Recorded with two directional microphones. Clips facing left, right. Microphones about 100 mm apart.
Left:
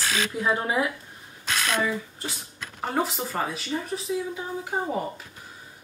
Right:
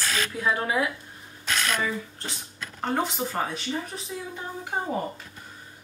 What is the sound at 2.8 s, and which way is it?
Speech, 5° left (ahead or behind).